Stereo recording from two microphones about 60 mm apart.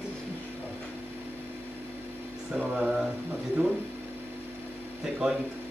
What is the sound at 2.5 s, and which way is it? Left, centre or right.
Speech, right.